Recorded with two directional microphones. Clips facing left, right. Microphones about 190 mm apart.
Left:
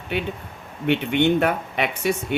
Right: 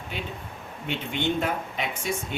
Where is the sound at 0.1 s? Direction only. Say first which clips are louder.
Left 10 dB; 65° left (ahead or behind).